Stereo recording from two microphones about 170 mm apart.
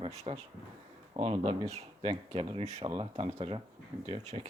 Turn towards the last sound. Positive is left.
turn(degrees=-40)  # may be behind; listen again after turning